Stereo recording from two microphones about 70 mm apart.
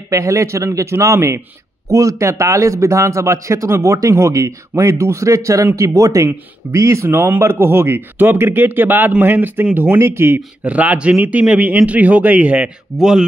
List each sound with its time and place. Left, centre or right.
0.1 s a man's voice: right
10.6 s speech: right
12.9 s speech: centre